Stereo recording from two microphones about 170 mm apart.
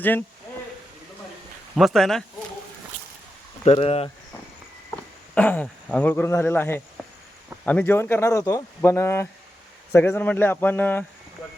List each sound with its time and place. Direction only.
0.0 s speech: 10° left (ahead or behind)
1.7 s speech: centre (ahead or behind)
3.6 s speech: 35° left (ahead or behind)
5.3 s speech: 10° left (ahead or behind)